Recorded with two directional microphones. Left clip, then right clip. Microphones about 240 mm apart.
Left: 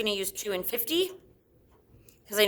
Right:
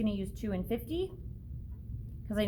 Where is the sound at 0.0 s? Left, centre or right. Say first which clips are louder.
Left 7 dB; left.